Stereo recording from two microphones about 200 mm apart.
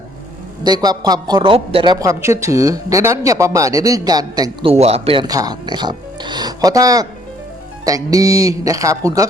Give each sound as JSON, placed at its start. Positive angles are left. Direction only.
{"t": 0.6, "sound": "speech", "side_deg": -20}
{"t": 4.7, "sound": "speech", "side_deg": -30}